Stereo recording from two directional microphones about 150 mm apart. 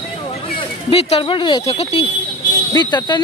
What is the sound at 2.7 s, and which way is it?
Speech, 30° left (ahead or behind).